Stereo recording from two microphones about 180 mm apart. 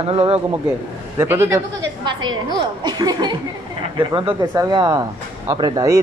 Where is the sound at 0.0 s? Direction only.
35° right (ahead or behind).